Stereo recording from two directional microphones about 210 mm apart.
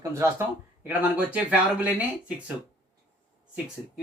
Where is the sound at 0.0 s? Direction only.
15° right (ahead or behind).